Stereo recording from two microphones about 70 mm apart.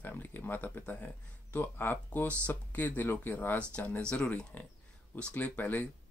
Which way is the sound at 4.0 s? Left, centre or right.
Centre.